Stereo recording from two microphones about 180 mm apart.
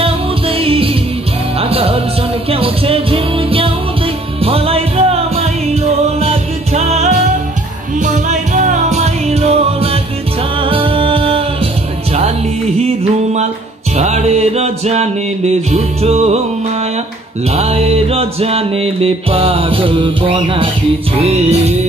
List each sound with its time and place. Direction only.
0.0 s music: 30° right (ahead or behind)
17.5 s music: 35° right (ahead or behind)